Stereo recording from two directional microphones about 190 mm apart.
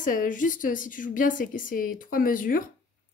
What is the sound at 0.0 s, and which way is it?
Speech, 45° left (ahead or behind).